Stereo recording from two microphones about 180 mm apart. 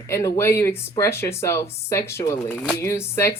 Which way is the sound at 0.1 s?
15° left (ahead or behind).